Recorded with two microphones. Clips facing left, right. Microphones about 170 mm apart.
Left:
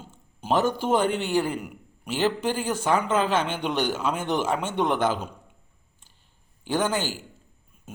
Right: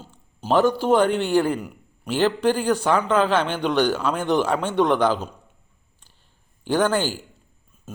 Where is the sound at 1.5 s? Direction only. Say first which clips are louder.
Right 3 dB; 5° left (ahead or behind).